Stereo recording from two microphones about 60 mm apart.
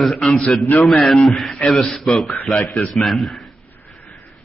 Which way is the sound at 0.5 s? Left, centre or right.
Centre.